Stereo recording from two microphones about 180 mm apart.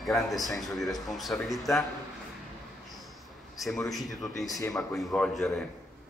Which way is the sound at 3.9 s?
Centre (ahead or behind).